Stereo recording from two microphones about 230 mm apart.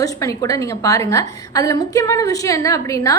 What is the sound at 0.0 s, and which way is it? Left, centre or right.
A woman's voice, centre.